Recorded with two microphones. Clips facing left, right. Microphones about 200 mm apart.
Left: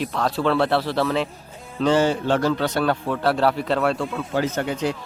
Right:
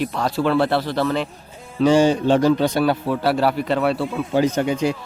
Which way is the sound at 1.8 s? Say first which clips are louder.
Right 4 dB; 15° right (ahead or behind).